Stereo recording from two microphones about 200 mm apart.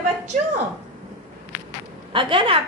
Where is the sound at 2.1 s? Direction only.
25° right (ahead or behind).